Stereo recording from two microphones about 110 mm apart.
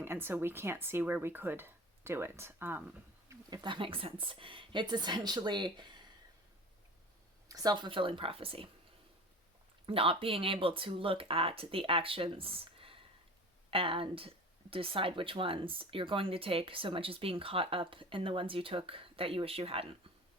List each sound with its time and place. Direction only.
0.0 s speech: 20° right (ahead or behind)
3.5 s a woman's voice: 45° right (ahead or behind)
7.4 s a woman's voice: 35° right (ahead or behind); by 8.7 s 55° right (ahead or behind)
9.8 s speech: 55° right (ahead or behind)